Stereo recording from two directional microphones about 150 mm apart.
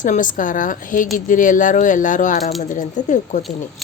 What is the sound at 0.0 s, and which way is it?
Speech, 60° left (ahead or behind).